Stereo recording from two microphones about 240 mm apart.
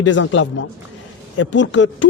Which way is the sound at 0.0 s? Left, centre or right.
Left.